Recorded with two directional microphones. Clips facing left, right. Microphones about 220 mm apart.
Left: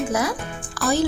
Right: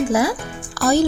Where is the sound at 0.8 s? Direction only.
40° right (ahead or behind).